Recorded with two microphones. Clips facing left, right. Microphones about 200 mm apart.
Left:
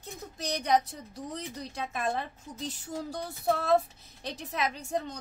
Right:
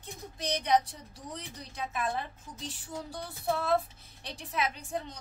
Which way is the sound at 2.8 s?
40° left (ahead or behind).